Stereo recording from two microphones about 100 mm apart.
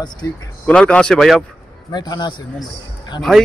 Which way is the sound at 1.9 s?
45° left (ahead or behind).